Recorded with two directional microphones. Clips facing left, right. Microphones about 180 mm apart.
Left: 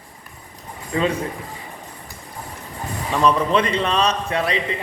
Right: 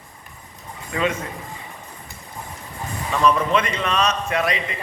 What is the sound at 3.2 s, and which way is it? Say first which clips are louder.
A man's voice: left 1 dB; 30° left (ahead or behind).